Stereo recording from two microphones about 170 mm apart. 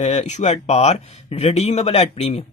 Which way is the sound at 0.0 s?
40° left (ahead or behind).